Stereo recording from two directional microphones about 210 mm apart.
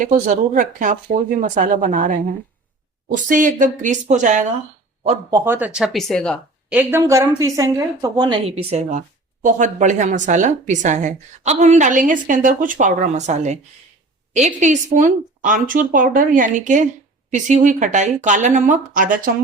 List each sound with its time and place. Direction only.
0.0 s a woman's voice: 35° right (ahead or behind)
5.3 s speech: 10° right (ahead or behind)
6.7 s a woman's voice: 10° right (ahead or behind); by 19.3 s 40° right (ahead or behind)